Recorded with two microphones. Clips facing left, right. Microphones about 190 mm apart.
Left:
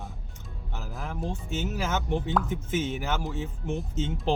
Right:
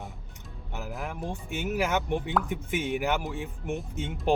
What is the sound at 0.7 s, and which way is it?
Music, 15° right (ahead or behind).